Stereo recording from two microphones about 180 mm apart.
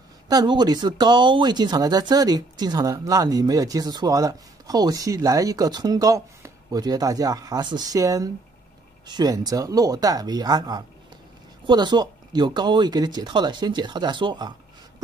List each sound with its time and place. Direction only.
0.3 s speech: 25° right (ahead or behind)